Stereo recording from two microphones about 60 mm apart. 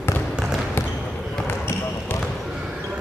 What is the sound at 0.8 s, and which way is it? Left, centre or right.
Basketball bounce, left.